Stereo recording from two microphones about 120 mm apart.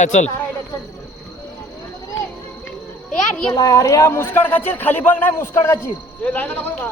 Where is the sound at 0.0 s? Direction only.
80° left.